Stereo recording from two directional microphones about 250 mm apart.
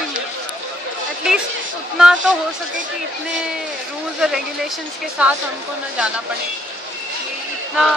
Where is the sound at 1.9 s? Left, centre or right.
Centre.